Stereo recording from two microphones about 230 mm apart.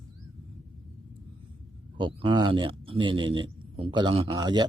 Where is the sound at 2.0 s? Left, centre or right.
Right.